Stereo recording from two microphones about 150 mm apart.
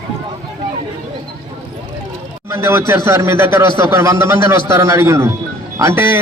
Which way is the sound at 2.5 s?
20° right (ahead or behind).